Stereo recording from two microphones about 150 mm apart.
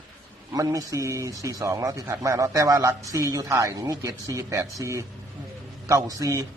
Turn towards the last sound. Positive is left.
turn(degrees=-25)  # may be behind; listen again after turning